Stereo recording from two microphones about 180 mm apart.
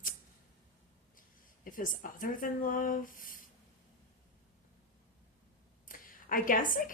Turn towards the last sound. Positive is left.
turn(degrees=50)  # may be behind; listen again after turning